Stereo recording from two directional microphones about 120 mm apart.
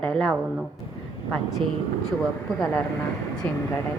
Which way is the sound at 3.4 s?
10° left (ahead or behind).